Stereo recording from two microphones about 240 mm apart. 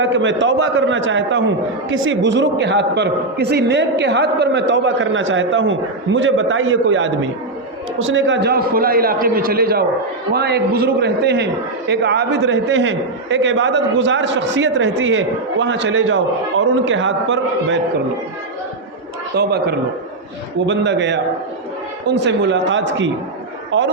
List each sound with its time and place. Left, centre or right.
0.0 s a man's voice: right
19.4 s a man's voice: right